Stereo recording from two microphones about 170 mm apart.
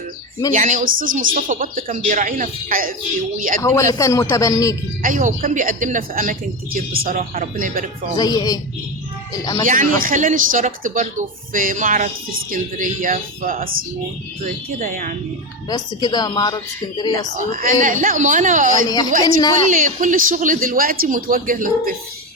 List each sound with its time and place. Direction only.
0.5 s speech: 45° right (ahead or behind)
3.6 s a man's voice: 15° left (ahead or behind)
5.0 s speech: 50° right (ahead or behind)
8.2 s a man's voice: 25° left (ahead or behind)
9.6 s speech: 50° right (ahead or behind)
15.7 s a man's voice: 25° left (ahead or behind)
17.3 s speech: 55° right (ahead or behind)
18.9 s a man's voice: 25° left (ahead or behind)
19.7 s speech: 50° right (ahead or behind)